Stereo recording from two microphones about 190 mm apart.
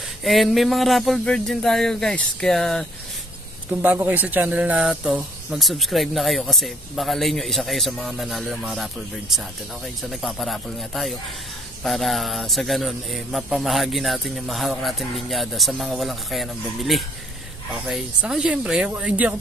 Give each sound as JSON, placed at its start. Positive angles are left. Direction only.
{"t": 0.2, "sound": "speech", "side_deg": 0}
{"t": 3.7, "sound": "speech", "side_deg": -10}
{"t": 10.0, "sound": "speech", "side_deg": 0}